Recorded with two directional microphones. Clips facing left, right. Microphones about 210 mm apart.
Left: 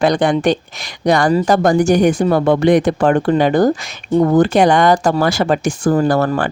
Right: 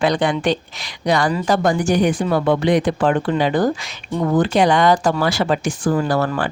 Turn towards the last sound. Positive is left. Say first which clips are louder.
# left 4 dB
turn(degrees=45)  # may be behind; listen again after turning